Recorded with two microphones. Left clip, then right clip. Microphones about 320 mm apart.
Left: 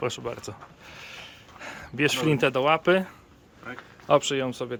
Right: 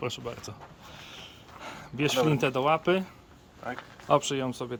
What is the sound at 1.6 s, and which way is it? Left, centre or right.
A man's voice, centre.